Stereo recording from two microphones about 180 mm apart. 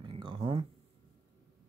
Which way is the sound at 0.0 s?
25° right (ahead or behind).